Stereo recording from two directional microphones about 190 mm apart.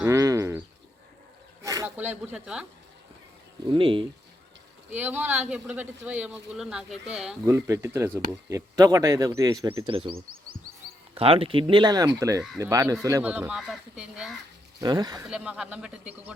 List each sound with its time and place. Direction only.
0.0 s bird: 15° right (ahead or behind)
1.6 s speech: 15° right (ahead or behind)
3.7 s speech: 25° right (ahead or behind)
4.9 s speech: 10° right (ahead or behind)
7.4 s speech: 15° right (ahead or behind)
11.1 s speech: 30° right (ahead or behind); by 14.3 s 5° right (ahead or behind)
14.8 s speech: 20° right (ahead or behind)
15.3 s speech: 5° right (ahead or behind)